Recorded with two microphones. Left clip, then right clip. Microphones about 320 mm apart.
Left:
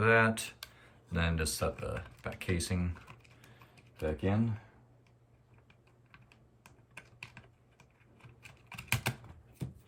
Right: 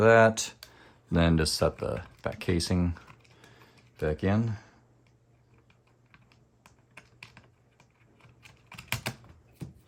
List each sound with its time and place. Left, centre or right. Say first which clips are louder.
0.0 s speech: right 7 dB; centre
4.0 s speech: right 5 dB; right
6.6 s typing: even; centre